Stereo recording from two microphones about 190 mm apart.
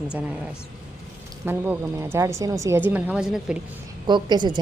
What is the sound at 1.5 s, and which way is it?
A woman's voice, 10° right (ahead or behind).